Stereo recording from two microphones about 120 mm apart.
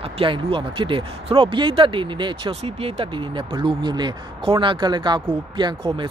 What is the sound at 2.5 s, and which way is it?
Speech, 55° right (ahead or behind).